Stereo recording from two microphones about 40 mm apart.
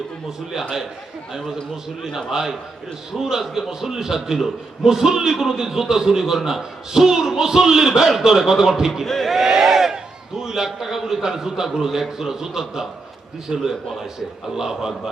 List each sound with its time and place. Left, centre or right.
2.0 s a man's voice: centre
9.0 s speech: centre
9.3 s a sound: centre
10.9 s a man's voice: centre
13.5 s a man's voice: right
14.5 s a man's voice: centre